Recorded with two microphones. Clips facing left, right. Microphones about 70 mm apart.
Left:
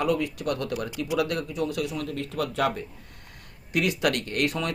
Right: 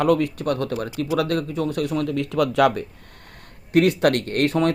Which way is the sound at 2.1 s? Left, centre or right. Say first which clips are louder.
Right 8 dB; right.